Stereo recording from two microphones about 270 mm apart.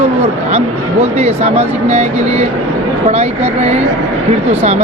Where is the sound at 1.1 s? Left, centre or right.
Right.